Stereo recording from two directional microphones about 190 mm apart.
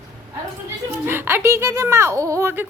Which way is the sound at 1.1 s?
10° right (ahead or behind).